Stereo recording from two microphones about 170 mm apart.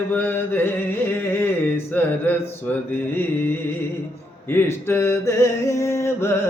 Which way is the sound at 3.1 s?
10° left (ahead or behind).